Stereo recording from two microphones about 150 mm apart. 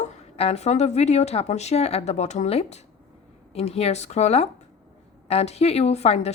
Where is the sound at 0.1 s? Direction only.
45° left (ahead or behind).